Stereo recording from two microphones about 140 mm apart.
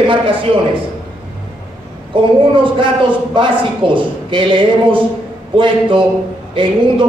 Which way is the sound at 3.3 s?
35° right (ahead or behind).